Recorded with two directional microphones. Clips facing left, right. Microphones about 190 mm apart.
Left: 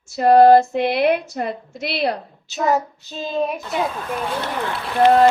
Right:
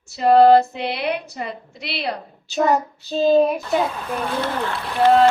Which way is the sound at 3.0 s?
35° right (ahead or behind).